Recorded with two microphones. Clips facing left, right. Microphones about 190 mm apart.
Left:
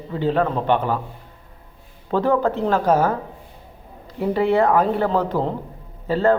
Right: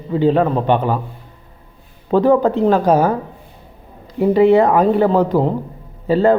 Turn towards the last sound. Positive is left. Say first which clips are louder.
# right 5 dB
turn(degrees=-15)  # may be behind; listen again after turning